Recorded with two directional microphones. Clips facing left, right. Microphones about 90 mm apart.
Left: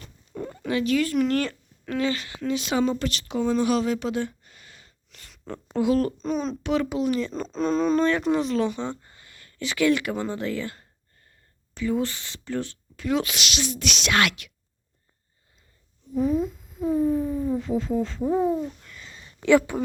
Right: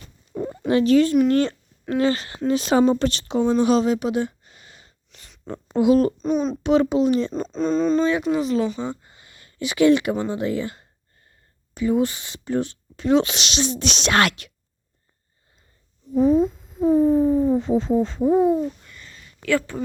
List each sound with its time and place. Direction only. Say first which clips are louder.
0.3 s a sound: right 6 dB; 15° right (ahead or behind)
0.7 s speech: right 7 dB; 35° right (ahead or behind)
6.1 s speech: right 5 dB; 5° right (ahead or behind)
6.6 s speech: right 7 dB; 25° right (ahead or behind)
7.4 s speech: left 1 dB; centre (ahead or behind); by 14.5 s 40° right (ahead or behind)
16.1 s speech: right 6 dB; 30° right (ahead or behind); by 19.1 s centre (ahead or behind)
19.1 s a sound: left 4 dB; 25° left (ahead or behind)